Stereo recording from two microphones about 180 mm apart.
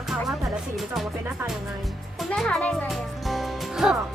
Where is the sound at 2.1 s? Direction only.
Centre (ahead or behind).